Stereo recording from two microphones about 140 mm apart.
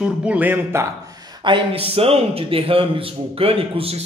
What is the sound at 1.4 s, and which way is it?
A man's voice, 40° right (ahead or behind).